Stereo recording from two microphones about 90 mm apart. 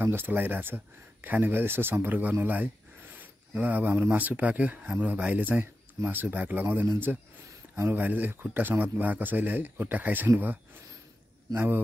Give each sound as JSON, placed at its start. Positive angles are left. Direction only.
{"t": 0.0, "sound": "speech", "side_deg": -25}
{"t": 8.0, "sound": "speech", "side_deg": -20}